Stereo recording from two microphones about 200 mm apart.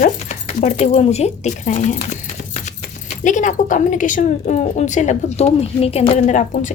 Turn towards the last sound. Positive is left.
turn(degrees=40)  # may be behind; listen again after turning